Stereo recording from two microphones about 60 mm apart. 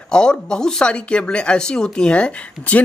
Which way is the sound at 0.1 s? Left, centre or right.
Centre.